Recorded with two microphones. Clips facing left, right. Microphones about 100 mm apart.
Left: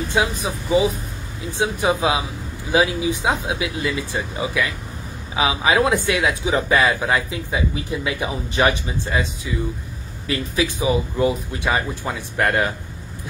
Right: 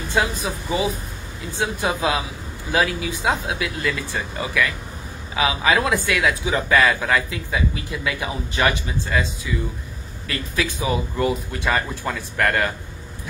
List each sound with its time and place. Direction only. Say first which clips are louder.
0.1 s a man's voice: right 1 dB; 15° left (ahead or behind)
10.2 s speech: left 3 dB; 15° left (ahead or behind)